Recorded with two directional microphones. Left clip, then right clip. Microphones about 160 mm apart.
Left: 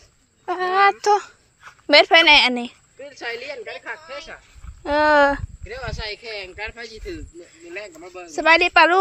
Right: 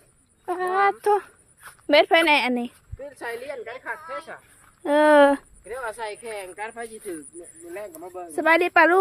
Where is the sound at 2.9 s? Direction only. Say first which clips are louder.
Left 3 dB; 55° right (ahead or behind).